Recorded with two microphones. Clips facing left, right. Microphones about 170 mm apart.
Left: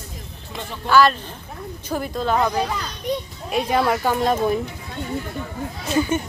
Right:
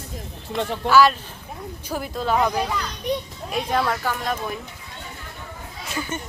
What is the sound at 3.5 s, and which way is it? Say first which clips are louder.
Speech: left 4 dB; 10° left (ahead or behind).